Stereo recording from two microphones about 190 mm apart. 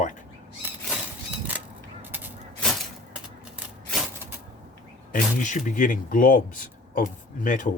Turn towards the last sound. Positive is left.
turn(degrees=45)  # may be behind; listen again after turning